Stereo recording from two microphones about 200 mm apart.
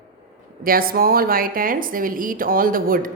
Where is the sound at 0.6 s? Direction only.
45° right (ahead or behind).